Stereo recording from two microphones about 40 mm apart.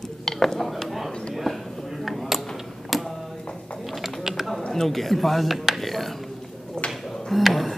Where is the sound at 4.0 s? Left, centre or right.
Centre.